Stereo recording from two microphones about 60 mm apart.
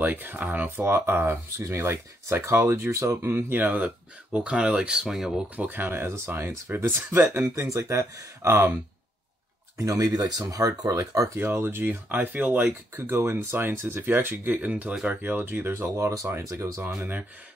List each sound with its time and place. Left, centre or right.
0.0 s speech: right
3.3 s speech: right; by 5.4 s centre
5.6 s speech: right
9.8 s speech: right
10.8 s speech: right
11.3 s speech: right
12.6 s speech: right
14.7 s speech: right
15.2 s speech: right
16.0 s speech: right
16.8 s speech: right